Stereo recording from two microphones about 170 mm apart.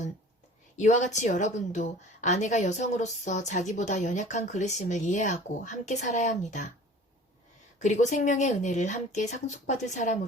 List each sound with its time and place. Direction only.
0.8 s a woman's voice: 45° left (ahead or behind)
7.8 s a woman's voice: 45° left (ahead or behind)